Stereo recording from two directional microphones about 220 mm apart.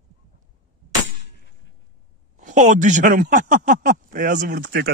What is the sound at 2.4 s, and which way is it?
Speech, 35° right (ahead or behind).